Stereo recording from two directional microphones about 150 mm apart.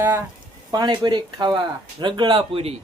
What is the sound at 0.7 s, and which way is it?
Speech, 30° right (ahead or behind).